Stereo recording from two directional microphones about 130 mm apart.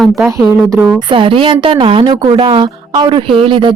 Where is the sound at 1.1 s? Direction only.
40° right (ahead or behind).